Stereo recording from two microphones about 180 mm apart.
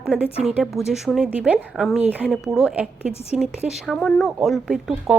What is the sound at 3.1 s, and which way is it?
Speech, 35° left (ahead or behind).